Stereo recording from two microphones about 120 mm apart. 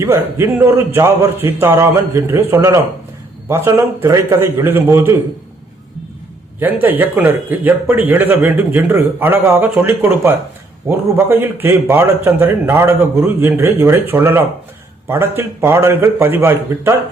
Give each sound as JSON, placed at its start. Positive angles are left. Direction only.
{"t": 0.0, "sound": "a man's voice", "side_deg": -25}
{"t": 6.6, "sound": "a man's voice", "side_deg": -15}